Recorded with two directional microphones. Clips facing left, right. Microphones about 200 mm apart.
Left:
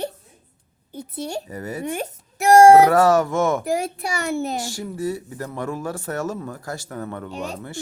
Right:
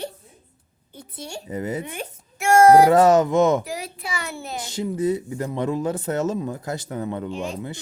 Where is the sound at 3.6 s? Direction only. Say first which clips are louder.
Left 8 dB; 50° left (ahead or behind).